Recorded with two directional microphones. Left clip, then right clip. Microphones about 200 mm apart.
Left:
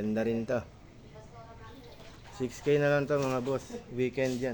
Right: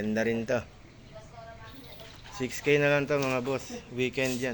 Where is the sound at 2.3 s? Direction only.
5° left (ahead or behind).